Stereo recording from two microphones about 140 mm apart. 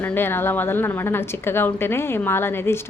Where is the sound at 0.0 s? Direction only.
15° left (ahead or behind).